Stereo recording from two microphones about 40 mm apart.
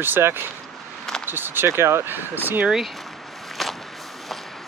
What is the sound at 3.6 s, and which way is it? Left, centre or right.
Whip, centre.